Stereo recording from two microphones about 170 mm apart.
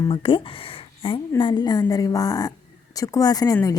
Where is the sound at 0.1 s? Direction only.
30° left (ahead or behind).